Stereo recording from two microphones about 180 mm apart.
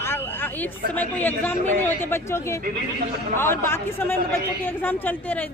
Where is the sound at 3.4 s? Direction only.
15° left (ahead or behind).